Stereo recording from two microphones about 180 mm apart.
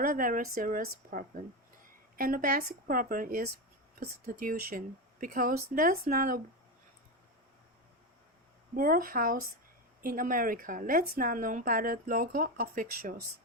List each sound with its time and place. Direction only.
0.0 s a woman's voice: 50° right (ahead or behind)
8.7 s a woman's voice: 50° right (ahead or behind)